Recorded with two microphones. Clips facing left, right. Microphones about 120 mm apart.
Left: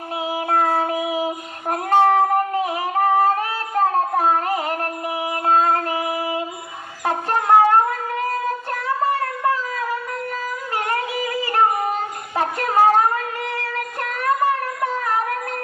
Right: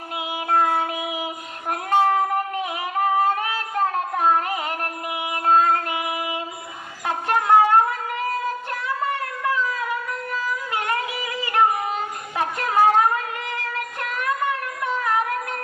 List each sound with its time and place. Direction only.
0.3 s child singing: 35° left (ahead or behind)
1.7 s singing: 35° left (ahead or behind)
5.5 s female singing: 35° left (ahead or behind)
7.0 s a sound: 35° left (ahead or behind)
10.8 s music: 35° left (ahead or behind)
12.4 s a sound: 35° left (ahead or behind)